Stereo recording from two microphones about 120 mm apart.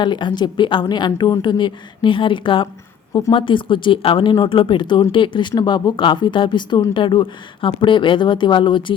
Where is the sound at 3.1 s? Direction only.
35° left (ahead or behind).